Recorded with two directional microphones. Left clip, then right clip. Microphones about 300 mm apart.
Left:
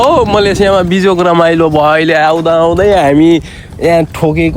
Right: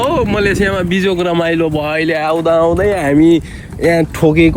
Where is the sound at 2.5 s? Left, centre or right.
Left.